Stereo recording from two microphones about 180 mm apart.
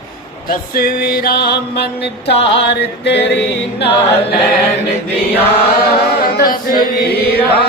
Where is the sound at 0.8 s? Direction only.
55° left (ahead or behind).